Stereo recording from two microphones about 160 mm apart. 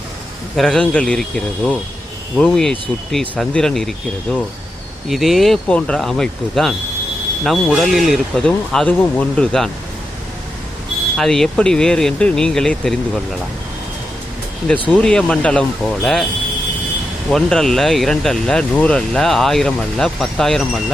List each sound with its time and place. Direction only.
0.5 s speech: centre (ahead or behind)
11.2 s speech: 5° left (ahead or behind)
14.8 s speech: 5° left (ahead or behind)
17.3 s speech: centre (ahead or behind)